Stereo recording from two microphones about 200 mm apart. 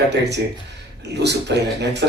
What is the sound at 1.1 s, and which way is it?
Speech, 60° right (ahead or behind).